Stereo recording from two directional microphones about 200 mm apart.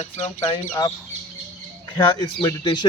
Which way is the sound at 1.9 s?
20° left (ahead or behind).